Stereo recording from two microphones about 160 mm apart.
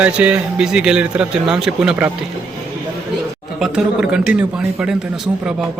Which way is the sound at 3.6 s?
5° right (ahead or behind).